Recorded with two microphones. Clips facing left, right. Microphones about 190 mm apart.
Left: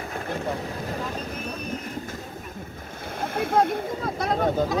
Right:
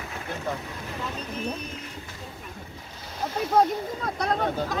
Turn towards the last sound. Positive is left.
turn(degrees=0)  # may be behind; listen again after turning